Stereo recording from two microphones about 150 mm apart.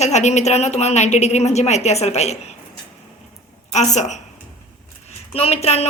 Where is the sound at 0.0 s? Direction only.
50° left (ahead or behind).